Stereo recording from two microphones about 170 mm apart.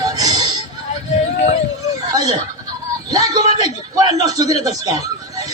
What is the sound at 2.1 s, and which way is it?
Goat, 20° right (ahead or behind).